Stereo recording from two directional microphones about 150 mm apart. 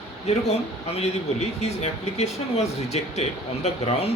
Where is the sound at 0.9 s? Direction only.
45° left (ahead or behind).